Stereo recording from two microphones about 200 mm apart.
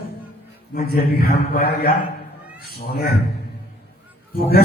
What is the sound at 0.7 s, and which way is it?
A man's voice, 50° left (ahead or behind).